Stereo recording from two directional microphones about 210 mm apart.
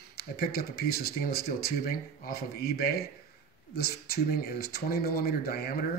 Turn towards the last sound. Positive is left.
turn(degrees=50)  # may be behind; listen again after turning